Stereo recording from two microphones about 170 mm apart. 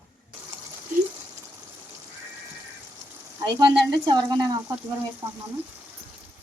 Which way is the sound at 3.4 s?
25° right (ahead or behind).